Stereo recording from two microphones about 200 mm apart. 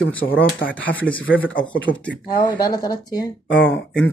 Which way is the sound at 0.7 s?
5° left (ahead or behind).